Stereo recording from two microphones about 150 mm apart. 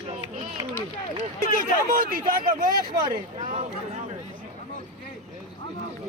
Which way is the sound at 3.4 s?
60° right (ahead or behind).